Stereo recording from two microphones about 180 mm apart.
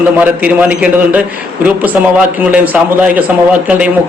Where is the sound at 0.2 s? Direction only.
10° right (ahead or behind).